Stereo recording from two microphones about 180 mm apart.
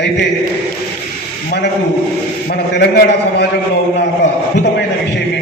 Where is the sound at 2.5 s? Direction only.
65° left (ahead or behind).